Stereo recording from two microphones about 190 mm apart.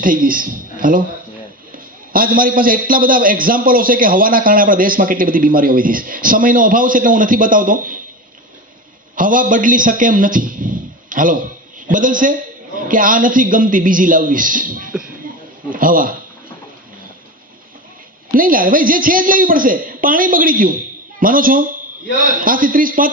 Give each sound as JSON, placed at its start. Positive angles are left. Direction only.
{"t": 0.0, "sound": "speech", "side_deg": -45}
{"t": 2.1, "sound": "a man's voice", "side_deg": -50}
{"t": 9.1, "sound": "a man's voice", "side_deg": -45}
{"t": 18.3, "sound": "a man's voice", "side_deg": -45}